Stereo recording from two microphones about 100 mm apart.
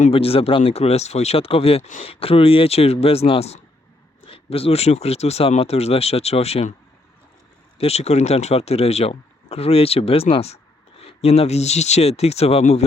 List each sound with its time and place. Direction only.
0.1 s speech: 70° left (ahead or behind); by 6.7 s 90° left
7.8 s speech: 90° left